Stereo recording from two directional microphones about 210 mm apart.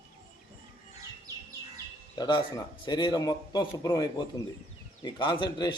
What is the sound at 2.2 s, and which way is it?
A man's voice, 20° left (ahead or behind).